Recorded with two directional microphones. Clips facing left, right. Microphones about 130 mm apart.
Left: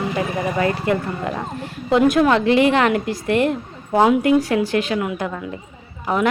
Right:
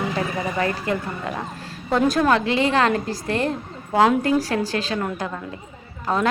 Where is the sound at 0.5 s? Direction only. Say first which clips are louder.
Left 5 dB; 30° left (ahead or behind).